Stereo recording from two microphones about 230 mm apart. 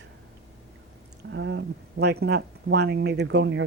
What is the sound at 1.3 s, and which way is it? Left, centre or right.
Speech, right.